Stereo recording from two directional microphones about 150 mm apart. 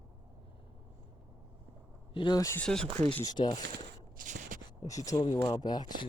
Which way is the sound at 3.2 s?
30° left (ahead or behind).